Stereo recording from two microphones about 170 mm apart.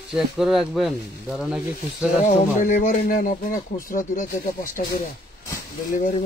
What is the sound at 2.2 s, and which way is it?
Speech, 50° left (ahead or behind).